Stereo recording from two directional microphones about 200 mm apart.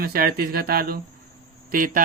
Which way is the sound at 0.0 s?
50° right (ahead or behind).